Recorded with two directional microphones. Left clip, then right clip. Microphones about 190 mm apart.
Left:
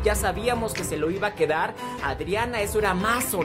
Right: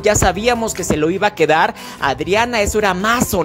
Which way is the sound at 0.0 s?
45° right (ahead or behind).